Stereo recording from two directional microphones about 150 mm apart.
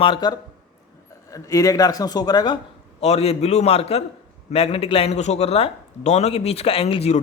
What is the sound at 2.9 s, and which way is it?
A man's voice, 45° left (ahead or behind).